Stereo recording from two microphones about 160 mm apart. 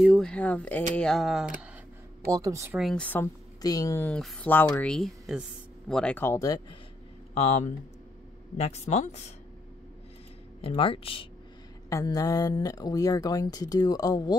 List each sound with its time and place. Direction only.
0.0 s speech: centre (ahead or behind)
2.3 s speech: 20° right (ahead or behind)
2.8 s speech: 5° left (ahead or behind)
3.6 s speech: 20° left (ahead or behind)
4.1 s speech: 10° left (ahead or behind); by 6.8 s 25° left (ahead or behind)
7.3 s speech: 45° left (ahead or behind)
10.6 s speech: 35° left (ahead or behind)
11.9 s speech: 20° left (ahead or behind)